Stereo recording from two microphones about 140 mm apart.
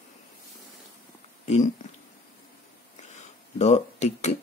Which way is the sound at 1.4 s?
50° left (ahead or behind).